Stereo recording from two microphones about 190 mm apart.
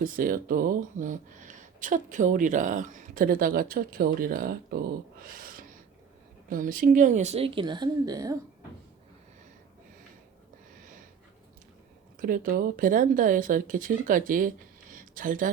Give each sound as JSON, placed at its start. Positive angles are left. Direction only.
{"t": 0.0, "sound": "speech", "side_deg": -45}
{"t": 12.2, "sound": "speech", "side_deg": -45}
{"t": 14.9, "sound": "a sound", "side_deg": -45}